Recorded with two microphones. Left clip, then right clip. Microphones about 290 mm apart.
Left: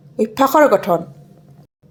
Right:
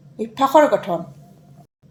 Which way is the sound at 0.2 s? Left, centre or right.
Left.